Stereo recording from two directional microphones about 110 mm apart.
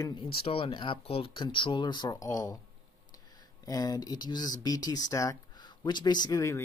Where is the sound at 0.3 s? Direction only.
60° left (ahead or behind); by 2.5 s 30° left (ahead or behind).